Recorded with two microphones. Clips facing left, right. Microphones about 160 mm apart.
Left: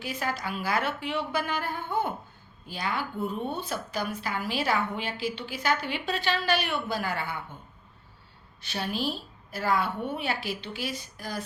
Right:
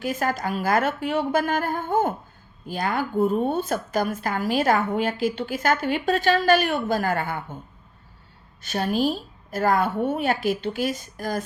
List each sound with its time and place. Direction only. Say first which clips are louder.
0.0 s speech: right 7 dB; 45° right (ahead or behind)
8.6 s speech: right 8 dB; 45° right (ahead or behind)